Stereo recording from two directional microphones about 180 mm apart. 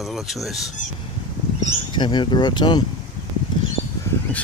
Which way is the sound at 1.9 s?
25° left (ahead or behind).